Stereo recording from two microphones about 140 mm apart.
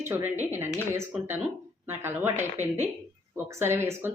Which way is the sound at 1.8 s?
15° right (ahead or behind).